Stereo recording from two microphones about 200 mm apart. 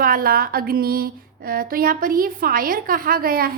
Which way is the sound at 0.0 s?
45° right (ahead or behind).